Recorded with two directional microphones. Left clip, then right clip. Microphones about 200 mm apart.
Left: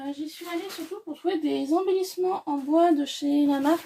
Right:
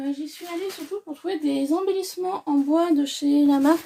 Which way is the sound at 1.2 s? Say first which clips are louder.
Right 1 dB; 45° right (ahead or behind).